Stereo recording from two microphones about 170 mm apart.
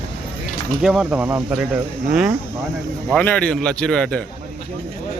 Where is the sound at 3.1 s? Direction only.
5° left (ahead or behind).